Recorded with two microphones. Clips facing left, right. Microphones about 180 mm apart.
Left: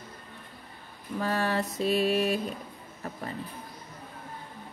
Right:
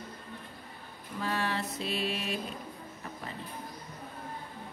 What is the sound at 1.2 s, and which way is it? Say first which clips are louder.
Speech: left 4 dB; 45° left (ahead or behind).